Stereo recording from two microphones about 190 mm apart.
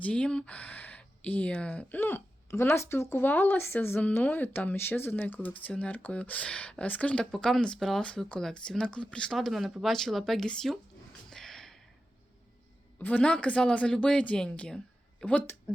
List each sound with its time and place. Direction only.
0.0 s speech: 5° left (ahead or behind)
11.3 s a sound: centre (ahead or behind)
13.0 s speech: 10° left (ahead or behind)